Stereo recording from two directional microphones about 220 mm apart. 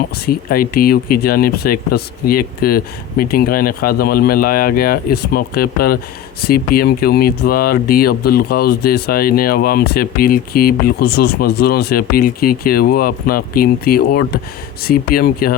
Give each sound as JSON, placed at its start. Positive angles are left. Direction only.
{"t": 0.3, "sound": "speech", "side_deg": 40}